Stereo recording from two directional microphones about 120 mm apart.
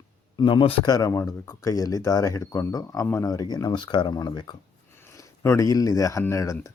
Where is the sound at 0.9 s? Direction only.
30° left (ahead or behind).